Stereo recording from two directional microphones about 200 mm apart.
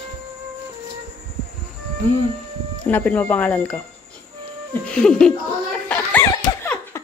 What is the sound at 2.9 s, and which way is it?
Speech, 5° left (ahead or behind).